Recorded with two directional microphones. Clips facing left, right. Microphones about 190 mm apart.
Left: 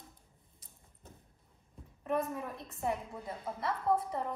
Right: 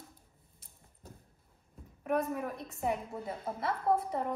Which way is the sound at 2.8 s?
20° right (ahead or behind).